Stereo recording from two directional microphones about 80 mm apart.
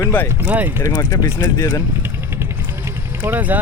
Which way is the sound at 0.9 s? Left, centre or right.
Left.